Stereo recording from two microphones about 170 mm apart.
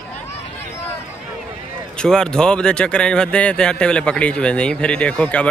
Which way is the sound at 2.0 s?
5° left (ahead or behind).